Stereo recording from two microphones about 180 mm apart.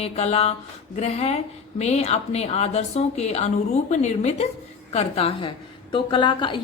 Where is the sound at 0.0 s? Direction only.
35° left (ahead or behind).